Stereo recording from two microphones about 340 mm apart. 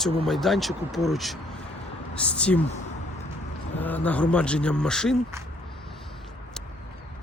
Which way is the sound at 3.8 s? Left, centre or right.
Centre.